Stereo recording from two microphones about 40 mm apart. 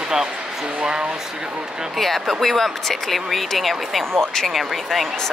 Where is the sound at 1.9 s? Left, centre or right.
Centre.